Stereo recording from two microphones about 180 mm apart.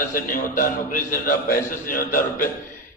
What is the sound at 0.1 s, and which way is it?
A man's voice, 50° left (ahead or behind).